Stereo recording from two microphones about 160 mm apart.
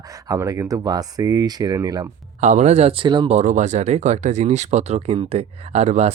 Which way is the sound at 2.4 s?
45° right (ahead or behind).